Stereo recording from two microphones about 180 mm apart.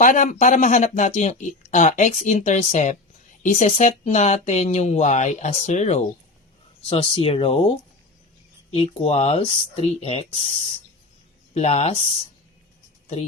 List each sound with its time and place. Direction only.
0.0 s speech: 45° left (ahead or behind)
8.7 s speech: 30° left (ahead or behind)
11.5 s speech: 35° left (ahead or behind)